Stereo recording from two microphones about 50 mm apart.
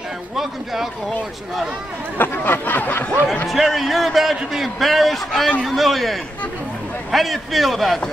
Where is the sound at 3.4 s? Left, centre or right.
Centre.